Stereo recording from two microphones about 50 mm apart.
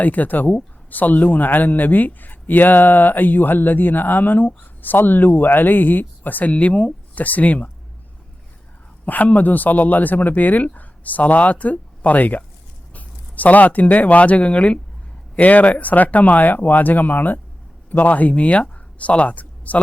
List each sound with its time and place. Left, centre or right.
0.0 s speech: left
9.0 s speech: left